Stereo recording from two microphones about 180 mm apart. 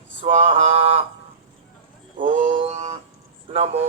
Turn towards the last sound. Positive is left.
turn(degrees=-35)  # may be behind; listen again after turning